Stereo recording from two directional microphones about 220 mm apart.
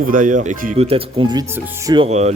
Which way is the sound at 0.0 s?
40° right (ahead or behind).